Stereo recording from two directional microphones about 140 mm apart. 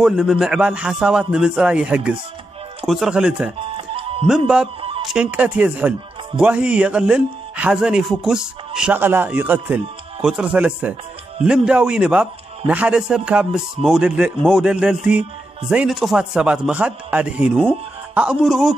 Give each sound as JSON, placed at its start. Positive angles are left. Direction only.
{"t": 0.0, "sound": "a man's voice", "side_deg": -5}
{"t": 3.5, "sound": "music", "side_deg": -40}
{"t": 4.3, "sound": "a man's voice", "side_deg": -5}